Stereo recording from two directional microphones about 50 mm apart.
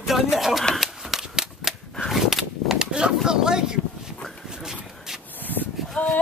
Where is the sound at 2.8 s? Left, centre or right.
Centre.